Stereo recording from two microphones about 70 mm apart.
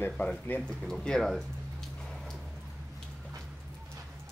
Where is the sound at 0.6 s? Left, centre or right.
Centre.